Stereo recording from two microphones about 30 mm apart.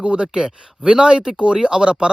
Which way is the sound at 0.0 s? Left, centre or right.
Right.